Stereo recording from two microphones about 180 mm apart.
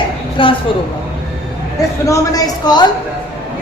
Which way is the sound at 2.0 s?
20° left (ahead or behind).